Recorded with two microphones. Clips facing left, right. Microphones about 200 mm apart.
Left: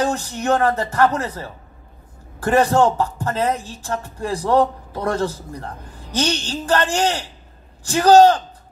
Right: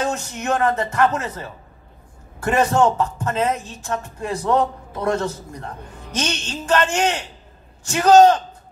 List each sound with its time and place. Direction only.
0.0 s speech: 35° left (ahead or behind)